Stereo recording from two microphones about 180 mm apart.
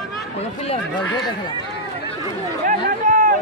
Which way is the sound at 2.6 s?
45° right (ahead or behind).